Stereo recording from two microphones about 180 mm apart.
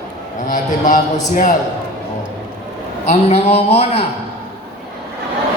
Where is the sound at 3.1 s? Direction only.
35° left (ahead or behind).